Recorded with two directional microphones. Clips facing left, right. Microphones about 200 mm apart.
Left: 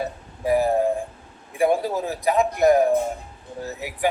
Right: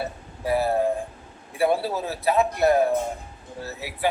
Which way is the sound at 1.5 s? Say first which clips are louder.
Left 2 dB; 15° left (ahead or behind).